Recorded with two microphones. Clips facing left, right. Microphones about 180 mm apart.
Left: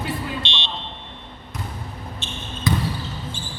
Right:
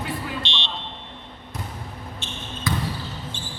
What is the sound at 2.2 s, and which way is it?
Basketball bounce, 25° left (ahead or behind).